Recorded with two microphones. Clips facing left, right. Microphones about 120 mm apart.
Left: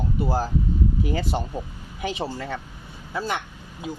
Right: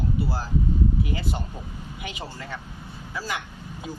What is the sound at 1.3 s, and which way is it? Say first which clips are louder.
Speech: left 6 dB; 25° left (ahead or behind).